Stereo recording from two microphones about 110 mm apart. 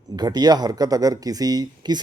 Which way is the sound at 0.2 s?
40° right (ahead or behind).